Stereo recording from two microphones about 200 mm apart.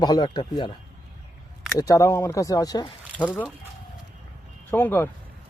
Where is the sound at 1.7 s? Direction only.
15° left (ahead or behind).